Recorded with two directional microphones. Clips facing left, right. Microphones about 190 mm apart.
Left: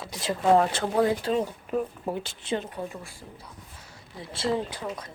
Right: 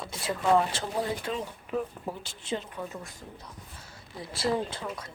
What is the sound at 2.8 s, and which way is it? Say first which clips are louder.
Speech: left 1 dB; 10° left (ahead or behind).